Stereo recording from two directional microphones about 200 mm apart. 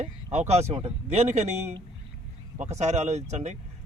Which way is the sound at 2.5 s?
35° right (ahead or behind).